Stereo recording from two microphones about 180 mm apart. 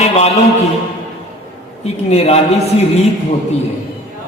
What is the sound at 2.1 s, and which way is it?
Speech, 35° left (ahead or behind).